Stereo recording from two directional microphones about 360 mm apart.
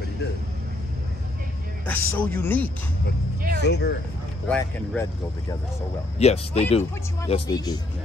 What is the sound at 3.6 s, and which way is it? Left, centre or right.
Speech, left.